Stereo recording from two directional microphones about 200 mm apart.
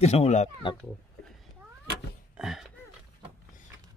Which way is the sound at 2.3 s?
5° right (ahead or behind).